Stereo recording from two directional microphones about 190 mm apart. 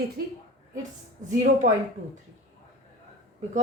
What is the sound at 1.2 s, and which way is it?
Speech, 40° right (ahead or behind).